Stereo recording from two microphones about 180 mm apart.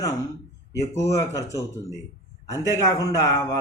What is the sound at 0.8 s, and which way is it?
A man's voice, 15° left (ahead or behind).